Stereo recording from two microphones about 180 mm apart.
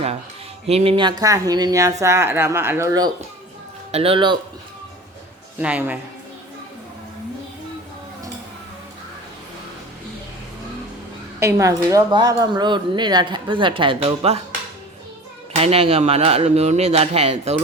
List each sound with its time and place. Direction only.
0.7 s speech: 35° right (ahead or behind)
3.9 s speech: 30° right (ahead or behind)
5.5 s speech: 10° right (ahead or behind)
11.3 s speech: 15° right (ahead or behind); by 14.4 s 35° right (ahead or behind)
15.5 s speech: 35° right (ahead or behind)